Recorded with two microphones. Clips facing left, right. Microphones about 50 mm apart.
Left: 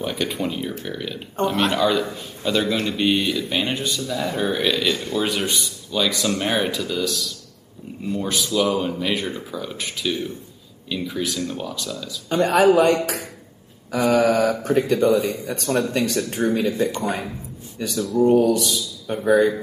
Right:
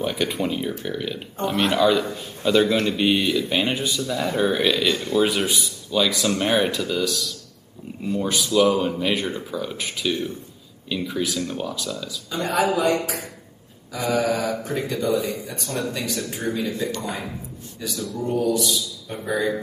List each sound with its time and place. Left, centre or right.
0.0 s speech: centre
12.3 s speech: left
14.5 s speech: left
16.2 s speech: left